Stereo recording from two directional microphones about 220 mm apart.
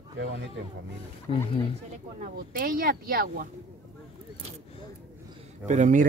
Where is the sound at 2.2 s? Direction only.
40° right (ahead or behind).